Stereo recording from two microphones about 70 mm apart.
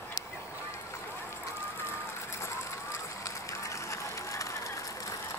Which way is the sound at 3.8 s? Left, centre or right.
Left.